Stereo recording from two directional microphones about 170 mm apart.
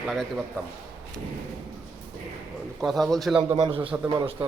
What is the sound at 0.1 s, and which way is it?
Speech, centre (ahead or behind).